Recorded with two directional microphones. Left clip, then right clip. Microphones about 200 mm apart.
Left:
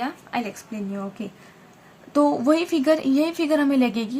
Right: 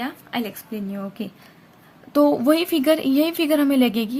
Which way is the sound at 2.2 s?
40° right (ahead or behind).